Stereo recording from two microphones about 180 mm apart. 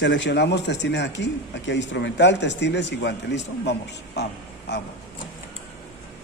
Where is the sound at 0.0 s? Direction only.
80° left.